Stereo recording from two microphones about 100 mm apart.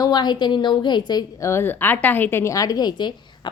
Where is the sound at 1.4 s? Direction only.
25° left (ahead or behind); by 3.5 s 50° left (ahead or behind).